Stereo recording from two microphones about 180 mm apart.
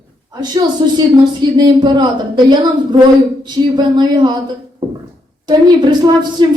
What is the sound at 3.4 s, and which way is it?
Speech, 25° right (ahead or behind).